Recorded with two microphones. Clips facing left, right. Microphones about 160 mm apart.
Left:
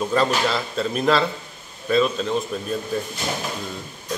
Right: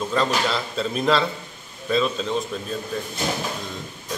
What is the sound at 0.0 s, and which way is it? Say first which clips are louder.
A man's voice: left 2 dB; 5° left (ahead or behind).